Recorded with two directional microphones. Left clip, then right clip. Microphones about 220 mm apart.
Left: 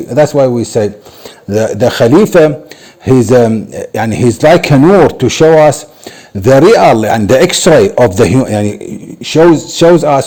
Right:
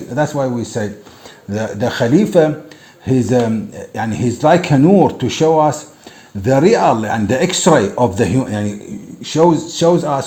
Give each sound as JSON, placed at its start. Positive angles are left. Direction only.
{"t": 0.1, "sound": "a man's voice", "side_deg": 50}